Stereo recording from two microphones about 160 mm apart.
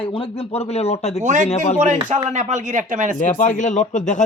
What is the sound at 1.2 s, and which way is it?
Speech, 50° right (ahead or behind).